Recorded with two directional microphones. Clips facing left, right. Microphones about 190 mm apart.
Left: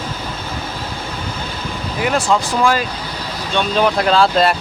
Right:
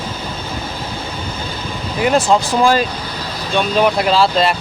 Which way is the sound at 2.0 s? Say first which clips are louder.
Right 3 dB; 25° right (ahead or behind).